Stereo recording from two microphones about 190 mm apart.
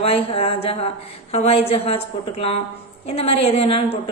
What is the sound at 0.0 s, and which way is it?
A woman's voice, 30° left (ahead or behind).